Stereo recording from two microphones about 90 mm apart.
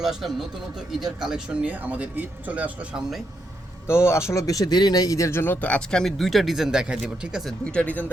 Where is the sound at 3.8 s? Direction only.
30° left (ahead or behind); by 7.5 s 5° right (ahead or behind).